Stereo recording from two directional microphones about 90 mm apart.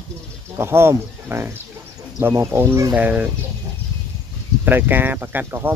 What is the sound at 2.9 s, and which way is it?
Speech, 15° right (ahead or behind).